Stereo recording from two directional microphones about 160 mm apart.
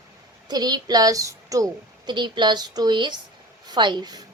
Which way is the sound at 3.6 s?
25° right (ahead or behind).